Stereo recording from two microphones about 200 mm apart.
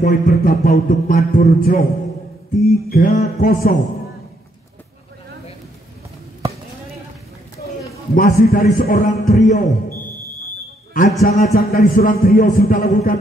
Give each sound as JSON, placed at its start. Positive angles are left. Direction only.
{"t": 0.0, "sound": "a man's voice", "side_deg": 45}
{"t": 8.1, "sound": "a man's voice", "side_deg": 45}
{"t": 10.9, "sound": "a sound", "side_deg": 40}
{"t": 11.2, "sound": "a man's voice", "side_deg": 45}